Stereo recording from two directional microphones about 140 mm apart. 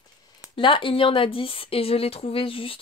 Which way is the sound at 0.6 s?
35° left (ahead or behind).